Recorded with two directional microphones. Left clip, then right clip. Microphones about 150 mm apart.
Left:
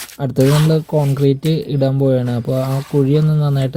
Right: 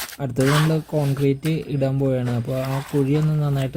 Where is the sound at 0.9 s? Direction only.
15° left (ahead or behind).